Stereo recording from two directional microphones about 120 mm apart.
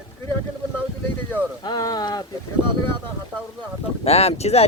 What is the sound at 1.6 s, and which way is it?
Speech, 35° left (ahead or behind).